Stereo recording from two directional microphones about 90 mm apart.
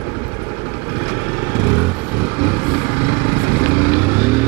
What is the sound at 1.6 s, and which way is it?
Vehicle, 20° right (ahead or behind).